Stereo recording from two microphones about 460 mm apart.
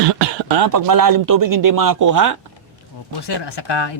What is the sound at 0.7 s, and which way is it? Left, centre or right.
Speech, right.